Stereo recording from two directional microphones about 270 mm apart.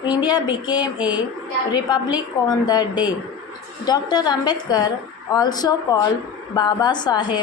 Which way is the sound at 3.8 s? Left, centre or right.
Centre.